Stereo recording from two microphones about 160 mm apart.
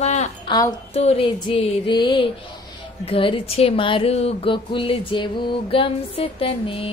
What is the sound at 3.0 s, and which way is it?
Speech, 35° left (ahead or behind).